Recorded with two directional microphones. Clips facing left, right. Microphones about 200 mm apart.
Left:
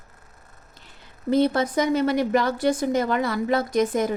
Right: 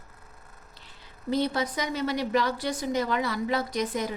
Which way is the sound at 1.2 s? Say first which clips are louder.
Left 6 dB; 55° left (ahead or behind).